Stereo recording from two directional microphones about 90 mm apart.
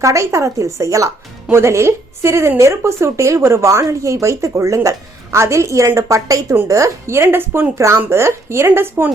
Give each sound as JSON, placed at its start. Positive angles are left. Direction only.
{"t": 0.0, "sound": "a woman's voice", "side_deg": -35}